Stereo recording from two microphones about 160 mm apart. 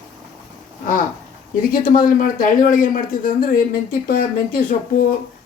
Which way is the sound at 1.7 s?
60° left (ahead or behind).